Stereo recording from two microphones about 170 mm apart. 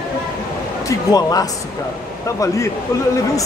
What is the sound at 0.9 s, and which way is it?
Speech, 20° left (ahead or behind).